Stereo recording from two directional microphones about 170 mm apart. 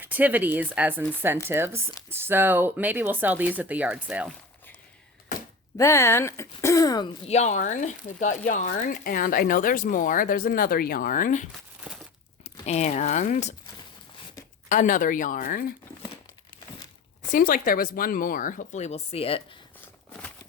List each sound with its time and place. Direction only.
0.0 s speech: 10° right (ahead or behind)
5.7 s speech: 15° left (ahead or behind)
7.3 s speech: 40° left (ahead or behind)
11.9 s crumpling: 5° right (ahead or behind)
12.6 s speech: 40° left (ahead or behind)
14.7 s speech: 50° left (ahead or behind)
17.3 s speech: 55° left (ahead or behind); by 19.4 s 35° left (ahead or behind)